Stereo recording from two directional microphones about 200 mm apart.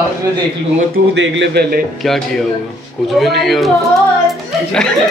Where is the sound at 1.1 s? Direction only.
65° right (ahead or behind).